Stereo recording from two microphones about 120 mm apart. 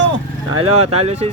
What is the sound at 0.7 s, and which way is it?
Speech, 60° right (ahead or behind).